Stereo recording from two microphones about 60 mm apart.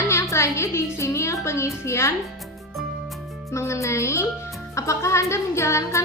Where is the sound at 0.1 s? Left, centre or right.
Left.